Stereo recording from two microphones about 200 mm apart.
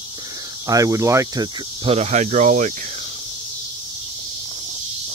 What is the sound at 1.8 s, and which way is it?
Speech, 30° right (ahead or behind).